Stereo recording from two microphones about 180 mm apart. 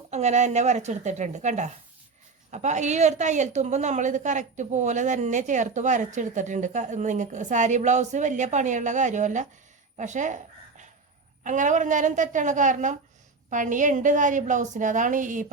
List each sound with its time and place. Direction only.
0.1 s a woman's voice: 40° right (ahead or behind)